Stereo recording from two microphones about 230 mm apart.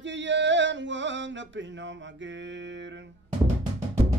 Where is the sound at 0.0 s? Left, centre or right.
Right.